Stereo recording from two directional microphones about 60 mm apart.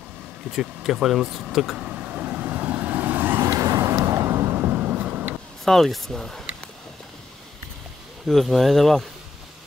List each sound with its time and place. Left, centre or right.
0.5 s speech: centre
1.8 s vehicle: right
3.5 s vehicle: right
5.7 s speech: centre
8.3 s speech: centre